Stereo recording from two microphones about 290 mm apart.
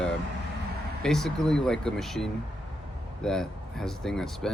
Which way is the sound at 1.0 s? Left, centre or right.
Centre.